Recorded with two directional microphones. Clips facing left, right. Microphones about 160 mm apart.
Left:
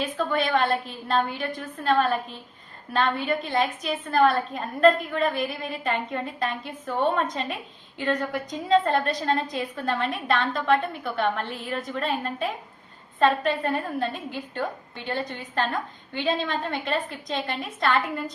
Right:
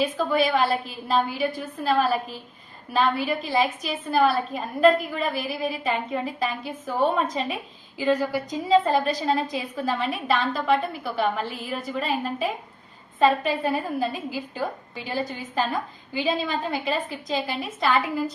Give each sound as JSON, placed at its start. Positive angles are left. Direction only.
{"t": 0.0, "sound": "a woman's voice", "side_deg": -5}